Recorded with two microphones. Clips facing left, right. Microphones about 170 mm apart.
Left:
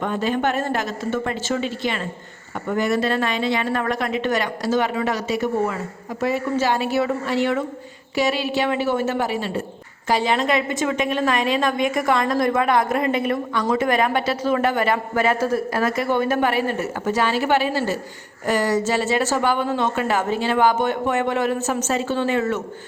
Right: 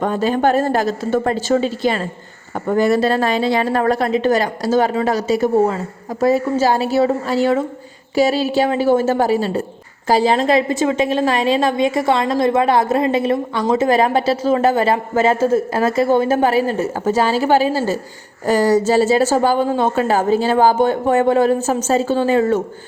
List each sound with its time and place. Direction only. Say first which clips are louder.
0.0 s a woman's voice: right 5 dB; 35° right (ahead or behind)